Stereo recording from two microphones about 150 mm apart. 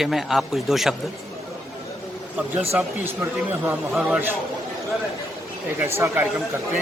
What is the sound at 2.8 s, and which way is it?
Speech, 10° right (ahead or behind).